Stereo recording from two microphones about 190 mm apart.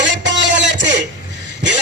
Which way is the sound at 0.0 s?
70° right (ahead or behind).